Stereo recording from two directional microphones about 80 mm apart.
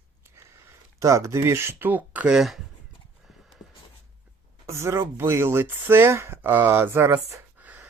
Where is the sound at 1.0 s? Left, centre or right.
Right; by 2.4 s centre.